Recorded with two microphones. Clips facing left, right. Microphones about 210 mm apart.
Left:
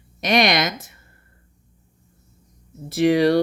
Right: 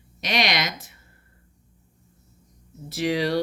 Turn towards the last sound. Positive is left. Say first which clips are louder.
# left 7 dB
turn(degrees=50)  # may be behind; listen again after turning